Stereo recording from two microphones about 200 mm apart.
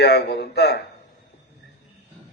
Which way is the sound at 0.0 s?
55° left (ahead or behind).